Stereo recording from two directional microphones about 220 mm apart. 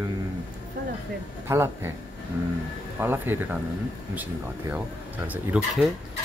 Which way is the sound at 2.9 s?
10° right (ahead or behind).